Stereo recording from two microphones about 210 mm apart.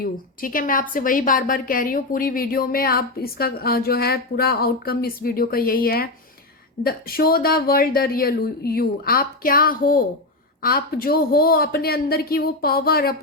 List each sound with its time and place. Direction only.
0.0 s a woman's voice: 40° left (ahead or behind)